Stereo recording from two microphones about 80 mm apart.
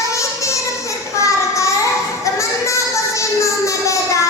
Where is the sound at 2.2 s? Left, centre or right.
Left.